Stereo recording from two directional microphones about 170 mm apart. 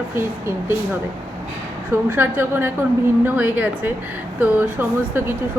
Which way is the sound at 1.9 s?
10° right (ahead or behind).